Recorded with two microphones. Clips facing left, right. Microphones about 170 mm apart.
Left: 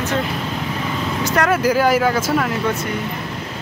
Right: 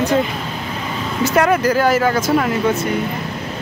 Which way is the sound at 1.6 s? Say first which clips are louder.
Even; 10° left (ahead or behind).